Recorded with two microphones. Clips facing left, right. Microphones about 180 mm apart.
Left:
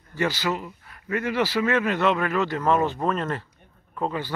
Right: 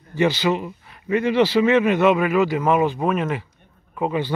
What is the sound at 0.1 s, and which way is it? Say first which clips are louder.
Speech: right 6 dB; 25° right (ahead or behind).